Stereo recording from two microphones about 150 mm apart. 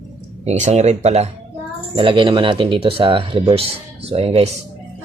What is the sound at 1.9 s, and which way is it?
Speech, 35° right (ahead or behind).